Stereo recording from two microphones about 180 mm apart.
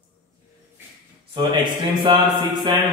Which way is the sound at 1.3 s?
25° right (ahead or behind).